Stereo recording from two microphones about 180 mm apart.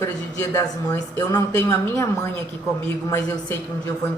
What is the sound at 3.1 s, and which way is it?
Speech, 15° left (ahead or behind).